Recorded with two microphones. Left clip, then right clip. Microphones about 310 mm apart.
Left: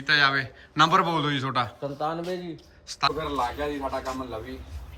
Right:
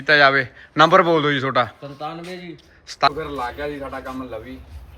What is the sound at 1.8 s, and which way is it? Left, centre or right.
Speech, centre.